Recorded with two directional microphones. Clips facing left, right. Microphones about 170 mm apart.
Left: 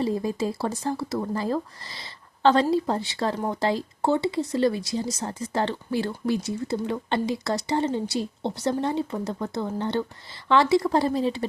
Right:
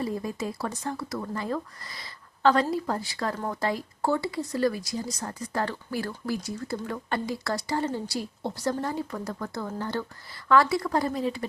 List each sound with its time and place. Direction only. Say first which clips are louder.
0.0 s speech: left 5 dB; 25° left (ahead or behind)